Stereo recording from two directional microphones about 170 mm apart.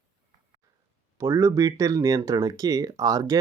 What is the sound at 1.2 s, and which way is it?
Speech, 15° right (ahead or behind).